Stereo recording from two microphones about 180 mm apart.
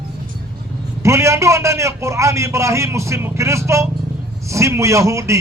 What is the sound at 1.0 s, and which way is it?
A man's voice, 15° right (ahead or behind).